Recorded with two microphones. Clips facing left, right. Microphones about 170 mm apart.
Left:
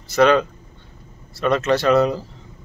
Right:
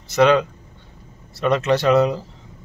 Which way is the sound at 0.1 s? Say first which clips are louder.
Even; 15° right (ahead or behind).